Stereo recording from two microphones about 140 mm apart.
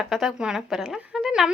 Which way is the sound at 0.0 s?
Centre (ahead or behind).